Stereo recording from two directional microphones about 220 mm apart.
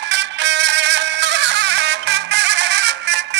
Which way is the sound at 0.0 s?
55° right (ahead or behind).